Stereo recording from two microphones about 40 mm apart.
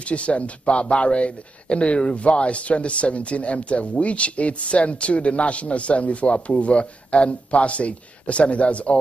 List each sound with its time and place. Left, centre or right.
0.0 s speech: left